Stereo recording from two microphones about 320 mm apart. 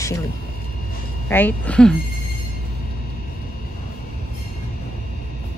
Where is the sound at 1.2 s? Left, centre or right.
Centre.